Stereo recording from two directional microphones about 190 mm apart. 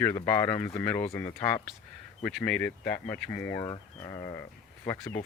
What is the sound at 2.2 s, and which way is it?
Speech, 5° left (ahead or behind).